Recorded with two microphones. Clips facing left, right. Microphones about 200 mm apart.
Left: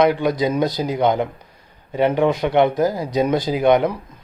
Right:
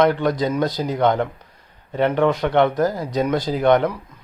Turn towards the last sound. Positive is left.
turn(degrees=10)  # may be behind; listen again after turning